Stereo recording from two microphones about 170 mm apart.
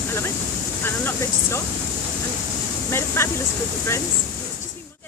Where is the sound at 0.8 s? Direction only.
15° left (ahead or behind).